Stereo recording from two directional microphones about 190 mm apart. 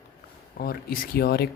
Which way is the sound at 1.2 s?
55° left (ahead or behind).